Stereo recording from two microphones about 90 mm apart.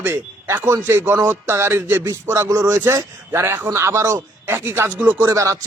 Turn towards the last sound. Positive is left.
turn(degrees=-35)  # may be behind; listen again after turning